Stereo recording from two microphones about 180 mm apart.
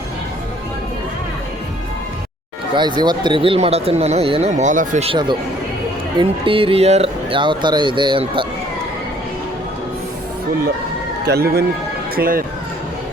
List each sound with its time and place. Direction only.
2.7 s speech: 25° right (ahead or behind); by 5.0 s 45° right (ahead or behind)
5.0 s speech: 25° right (ahead or behind)
11.3 s speech: 60° right (ahead or behind)